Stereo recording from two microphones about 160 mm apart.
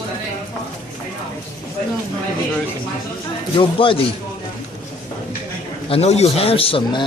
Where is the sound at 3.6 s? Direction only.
35° left (ahead or behind).